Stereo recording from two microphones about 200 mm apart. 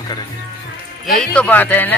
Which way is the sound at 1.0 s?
Centre (ahead or behind).